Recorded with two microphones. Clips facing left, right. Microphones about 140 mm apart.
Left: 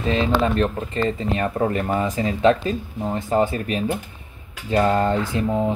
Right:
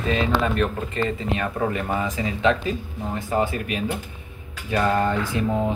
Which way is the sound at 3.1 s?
25° left (ahead or behind).